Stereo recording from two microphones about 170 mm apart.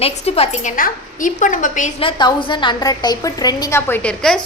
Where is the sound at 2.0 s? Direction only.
30° left (ahead or behind).